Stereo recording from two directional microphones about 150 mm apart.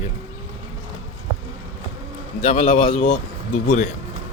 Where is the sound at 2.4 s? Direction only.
40° left (ahead or behind).